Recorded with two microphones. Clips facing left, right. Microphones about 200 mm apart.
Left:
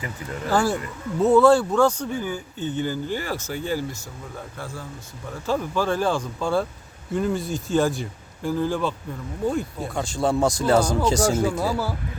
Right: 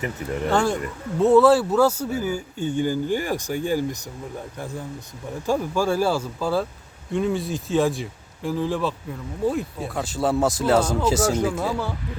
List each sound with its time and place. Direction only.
0.5 s speech: 5° left (ahead or behind)